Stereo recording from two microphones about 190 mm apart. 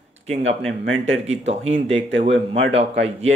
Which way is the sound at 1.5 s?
35° right (ahead or behind).